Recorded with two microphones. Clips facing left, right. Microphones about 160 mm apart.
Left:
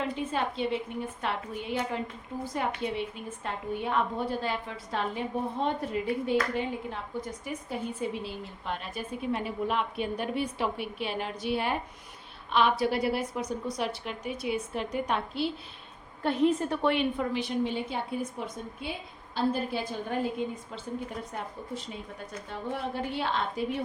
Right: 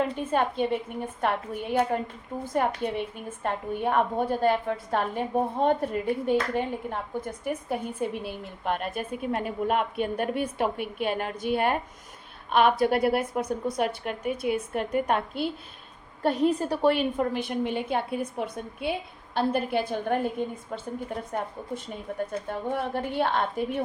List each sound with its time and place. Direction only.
0.2 s a woman's voice: 50° right (ahead or behind)
16.2 s a woman's voice: 35° right (ahead or behind)
17.2 s a woman's voice: 50° right (ahead or behind)
21.3 s a woman's voice: 50° right (ahead or behind)